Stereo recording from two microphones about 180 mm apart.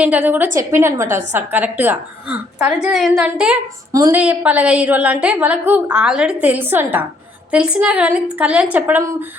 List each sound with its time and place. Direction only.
0.0 s a woman's voice: 5° right (ahead or behind)
3.9 s a woman's voice: 20° right (ahead or behind)
4.2 s a woman's voice: 10° right (ahead or behind)